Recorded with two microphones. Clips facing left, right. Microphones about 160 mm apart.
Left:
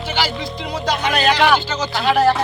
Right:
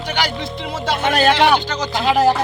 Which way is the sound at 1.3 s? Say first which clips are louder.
Left 2 dB; 25° right (ahead or behind).